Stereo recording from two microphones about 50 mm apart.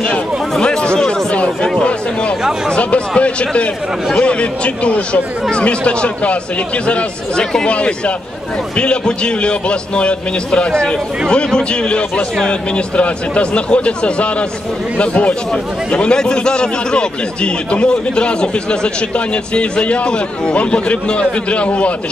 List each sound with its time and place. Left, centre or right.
0.0 s a sound: centre
0.9 s chatter: centre
1.3 s chatter: left
1.8 s a man's voice: left